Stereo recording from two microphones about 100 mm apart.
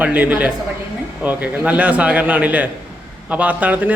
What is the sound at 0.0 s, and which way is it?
A man's voice, 15° right (ahead or behind).